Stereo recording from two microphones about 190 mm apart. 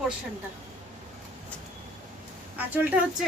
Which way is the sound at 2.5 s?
10° right (ahead or behind).